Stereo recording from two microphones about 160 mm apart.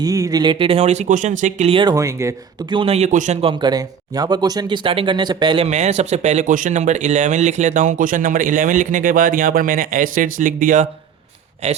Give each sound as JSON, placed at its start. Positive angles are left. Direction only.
{"t": 0.0, "sound": "speech", "side_deg": -20}
{"t": 1.7, "sound": "speech", "side_deg": -25}
{"t": 2.7, "sound": "speech", "side_deg": -40}
{"t": 3.4, "sound": "speech", "side_deg": -25}
{"t": 5.6, "sound": "speech", "side_deg": -45}